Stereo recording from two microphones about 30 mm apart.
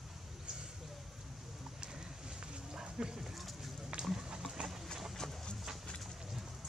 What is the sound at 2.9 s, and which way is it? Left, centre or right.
Clip-clop, right.